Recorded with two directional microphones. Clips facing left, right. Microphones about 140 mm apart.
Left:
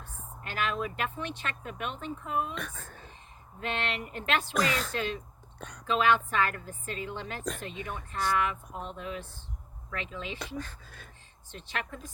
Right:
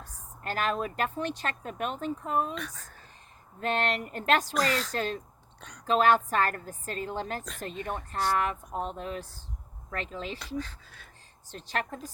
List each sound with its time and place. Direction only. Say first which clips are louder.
0.0 s speech: right 4 dB; 40° right (ahead or behind)
2.6 s a sound: left 2 dB; 40° right (ahead or behind)
3.6 s speech: right 5 dB; 40° right (ahead or behind)
5.5 s a sound: left 5 dB; 50° left (ahead or behind)
5.8 s speech: right 3 dB; 40° right (ahead or behind)
10.4 s speech: right 2 dB; 45° left (ahead or behind)
11.5 s speech: right 4 dB; 40° right (ahead or behind)